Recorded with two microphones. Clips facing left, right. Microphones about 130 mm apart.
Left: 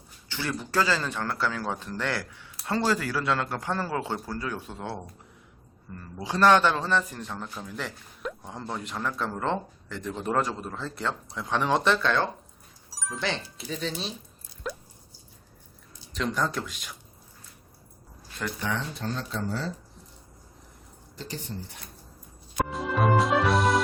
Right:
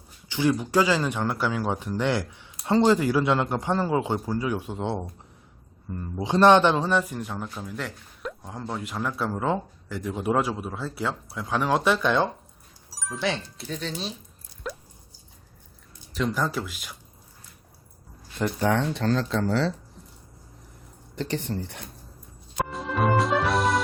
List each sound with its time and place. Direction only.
0.3 s a man's voice: 15° right (ahead or behind)
12.9 s speech: centre (ahead or behind)
14.6 s drip: centre (ahead or behind)
16.1 s speech: 5° right (ahead or behind)
18.6 s speech: 55° right (ahead or behind)
18.9 s speech: 90° right
21.2 s speech: 70° right (ahead or behind)
22.5 s music: centre (ahead or behind)